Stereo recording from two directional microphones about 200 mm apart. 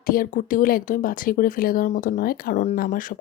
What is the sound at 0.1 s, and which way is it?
Speech, 45° left (ahead or behind).